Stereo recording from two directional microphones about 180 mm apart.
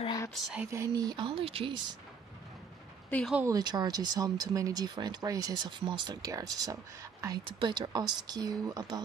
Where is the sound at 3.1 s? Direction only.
5° left (ahead or behind).